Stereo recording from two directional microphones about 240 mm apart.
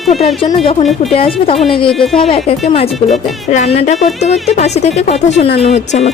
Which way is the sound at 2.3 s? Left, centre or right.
Left.